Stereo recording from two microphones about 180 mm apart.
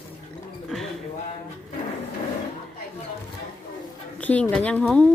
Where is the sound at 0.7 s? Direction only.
Centre (ahead or behind).